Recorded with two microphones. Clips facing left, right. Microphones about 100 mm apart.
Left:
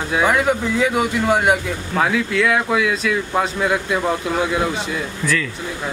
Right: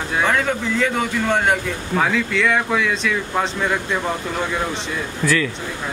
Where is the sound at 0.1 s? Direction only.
5° left (ahead or behind).